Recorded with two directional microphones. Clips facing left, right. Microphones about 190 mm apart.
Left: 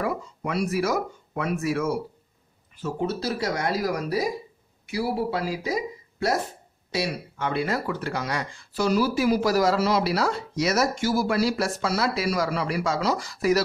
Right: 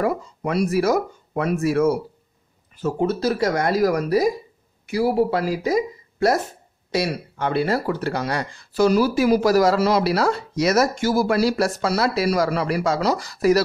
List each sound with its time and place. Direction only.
0.0 s speech: 40° right (ahead or behind)